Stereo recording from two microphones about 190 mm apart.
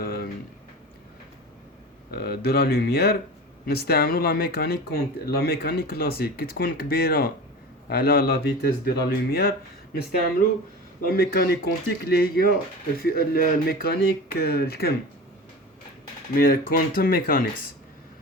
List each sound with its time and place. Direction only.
0.0 s a sound: 50° left (ahead or behind)
2.0 s speech: 55° left (ahead or behind)
11.0 s speech: 55° left (ahead or behind)
16.3 s speech: 50° left (ahead or behind)